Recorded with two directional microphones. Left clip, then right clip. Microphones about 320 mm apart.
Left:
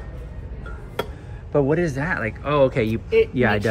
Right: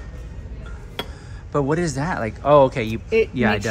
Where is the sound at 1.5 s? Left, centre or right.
Centre.